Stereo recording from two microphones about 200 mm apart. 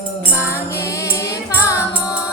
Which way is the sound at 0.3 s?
10° left (ahead or behind).